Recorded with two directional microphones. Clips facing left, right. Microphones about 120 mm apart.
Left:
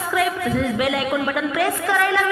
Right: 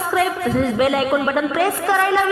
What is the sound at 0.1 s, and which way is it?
A woman's voice, 35° right (ahead or behind).